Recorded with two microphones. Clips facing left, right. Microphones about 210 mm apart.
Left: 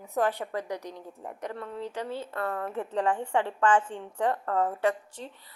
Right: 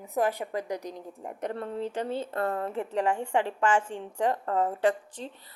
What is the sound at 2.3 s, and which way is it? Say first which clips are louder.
Speech: right 3 dB; 40° right (ahead or behind).